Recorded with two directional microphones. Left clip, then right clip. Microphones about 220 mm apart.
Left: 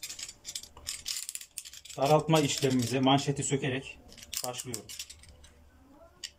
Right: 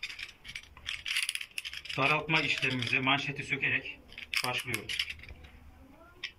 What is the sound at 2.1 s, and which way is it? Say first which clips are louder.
Speech: left 5 dB; 35° left (ahead or behind).